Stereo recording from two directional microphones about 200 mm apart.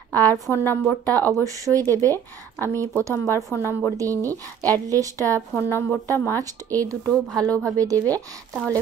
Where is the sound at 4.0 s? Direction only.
15° right (ahead or behind).